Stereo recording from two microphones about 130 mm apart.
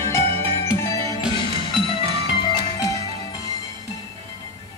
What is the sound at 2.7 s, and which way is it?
Music, 25° left (ahead or behind).